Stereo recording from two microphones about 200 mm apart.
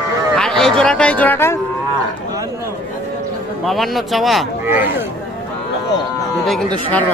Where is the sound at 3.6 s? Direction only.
Centre (ahead or behind).